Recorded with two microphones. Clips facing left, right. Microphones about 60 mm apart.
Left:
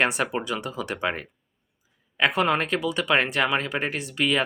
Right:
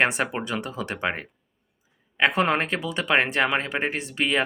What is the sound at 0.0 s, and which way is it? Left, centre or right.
Speech, right.